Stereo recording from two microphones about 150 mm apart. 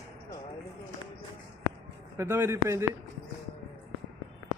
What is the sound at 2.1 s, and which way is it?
Speech, 15° right (ahead or behind).